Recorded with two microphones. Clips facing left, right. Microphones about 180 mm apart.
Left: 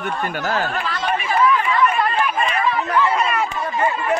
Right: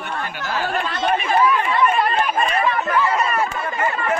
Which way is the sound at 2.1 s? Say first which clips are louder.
Right 1 dB; 40° right (ahead or behind).